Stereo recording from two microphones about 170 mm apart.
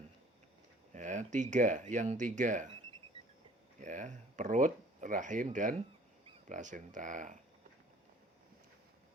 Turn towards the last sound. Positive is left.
turn(degrees=-50)  # may be behind; listen again after turning